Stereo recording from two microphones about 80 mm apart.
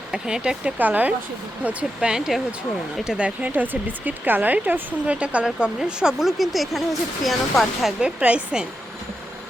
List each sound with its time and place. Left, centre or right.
0.1 s speech: centre
0.8 s speech: right
1.6 s speech: centre